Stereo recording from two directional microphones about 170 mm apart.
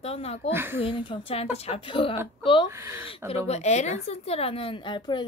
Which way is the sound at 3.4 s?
40° left (ahead or behind).